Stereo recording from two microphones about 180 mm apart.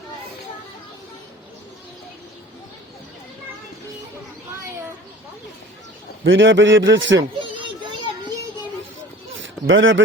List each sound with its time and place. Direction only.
6.2 s a man's voice: 90° right
7.5 s children playing: 25° right (ahead or behind)
9.4 s a sound: 90° right